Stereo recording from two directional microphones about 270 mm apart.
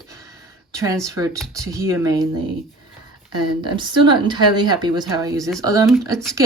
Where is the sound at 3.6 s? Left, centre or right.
Centre.